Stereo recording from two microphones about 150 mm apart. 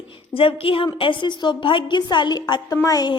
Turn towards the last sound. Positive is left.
turn(degrees=25)  # may be behind; listen again after turning